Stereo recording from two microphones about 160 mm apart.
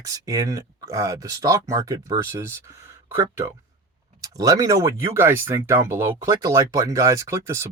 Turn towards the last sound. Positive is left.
turn(degrees=-20)  # may be behind; listen again after turning